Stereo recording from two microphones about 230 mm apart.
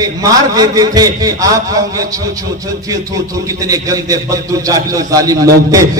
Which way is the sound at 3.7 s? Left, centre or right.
Centre.